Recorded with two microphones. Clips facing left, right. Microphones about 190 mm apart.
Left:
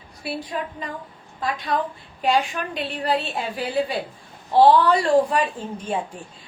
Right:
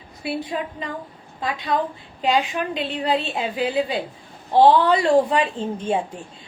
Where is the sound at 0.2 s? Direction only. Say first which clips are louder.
Right 3 dB; 20° right (ahead or behind).